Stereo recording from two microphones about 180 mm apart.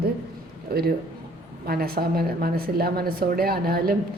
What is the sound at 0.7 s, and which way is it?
A woman's voice, 60° right (ahead or behind).